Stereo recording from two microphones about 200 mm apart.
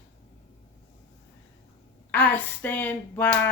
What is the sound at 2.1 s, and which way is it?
Speech, 10° left (ahead or behind).